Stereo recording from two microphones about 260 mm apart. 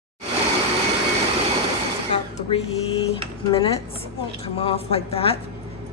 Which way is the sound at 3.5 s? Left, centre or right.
Left.